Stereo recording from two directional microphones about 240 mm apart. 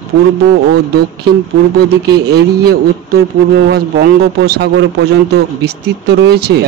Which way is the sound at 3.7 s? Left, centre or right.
Right.